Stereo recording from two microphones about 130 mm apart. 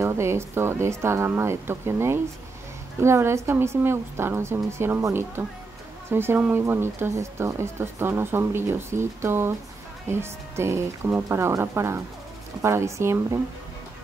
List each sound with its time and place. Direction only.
0.0 s speech: 20° right (ahead or behind)